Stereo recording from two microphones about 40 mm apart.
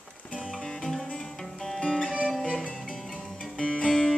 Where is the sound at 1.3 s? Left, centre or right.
Centre.